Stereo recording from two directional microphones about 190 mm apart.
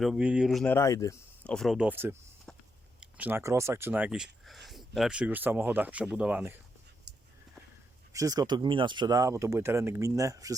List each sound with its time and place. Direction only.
0.0 s speech: 5° right (ahead or behind); by 1.5 s 15° left (ahead or behind)
1.5 s speech: centre (ahead or behind)
8.1 s speech: 15° right (ahead or behind)